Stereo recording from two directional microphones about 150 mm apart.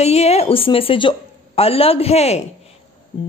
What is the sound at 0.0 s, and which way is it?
Speech, 45° left (ahead or behind).